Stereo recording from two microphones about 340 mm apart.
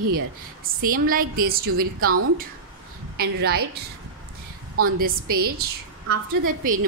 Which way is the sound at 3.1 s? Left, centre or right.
Right.